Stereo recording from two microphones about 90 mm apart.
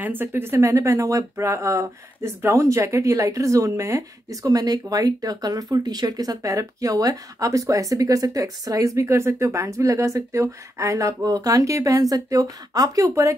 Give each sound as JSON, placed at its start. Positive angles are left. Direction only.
{"t": 0.0, "sound": "speech", "side_deg": -20}